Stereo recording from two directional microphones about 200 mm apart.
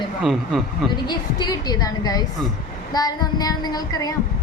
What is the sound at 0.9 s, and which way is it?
A woman's voice, 20° left (ahead or behind).